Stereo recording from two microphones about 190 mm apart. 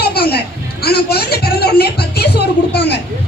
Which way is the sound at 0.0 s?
55° left (ahead or behind).